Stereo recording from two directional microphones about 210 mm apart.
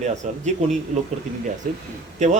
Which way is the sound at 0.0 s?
35° right (ahead or behind).